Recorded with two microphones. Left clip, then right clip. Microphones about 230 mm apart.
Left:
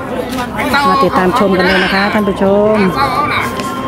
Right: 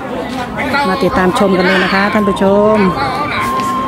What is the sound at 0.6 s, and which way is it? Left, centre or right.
Speech, left.